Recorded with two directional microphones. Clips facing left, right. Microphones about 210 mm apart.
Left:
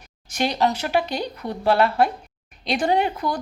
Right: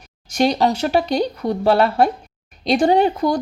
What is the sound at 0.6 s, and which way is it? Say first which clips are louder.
Speech: right 4 dB; 30° right (ahead or behind).